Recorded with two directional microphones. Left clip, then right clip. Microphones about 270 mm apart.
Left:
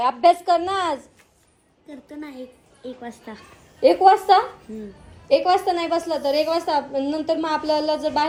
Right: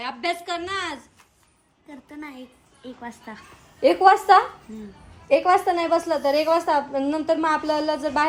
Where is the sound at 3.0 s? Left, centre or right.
Right.